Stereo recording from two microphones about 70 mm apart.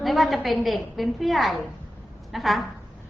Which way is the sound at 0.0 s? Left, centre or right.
Centre.